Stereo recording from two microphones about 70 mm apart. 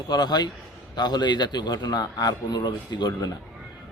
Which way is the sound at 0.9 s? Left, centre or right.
Left.